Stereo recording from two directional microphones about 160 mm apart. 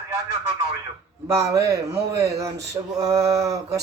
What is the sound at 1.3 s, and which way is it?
Speech, 20° right (ahead or behind).